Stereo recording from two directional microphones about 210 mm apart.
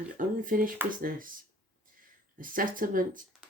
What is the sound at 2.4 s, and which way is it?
Speech, 40° right (ahead or behind).